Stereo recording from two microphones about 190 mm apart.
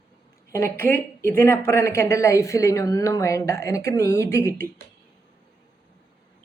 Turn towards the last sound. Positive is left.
turn(degrees=15)  # may be behind; listen again after turning